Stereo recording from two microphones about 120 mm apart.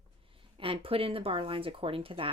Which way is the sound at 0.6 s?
50° right (ahead or behind).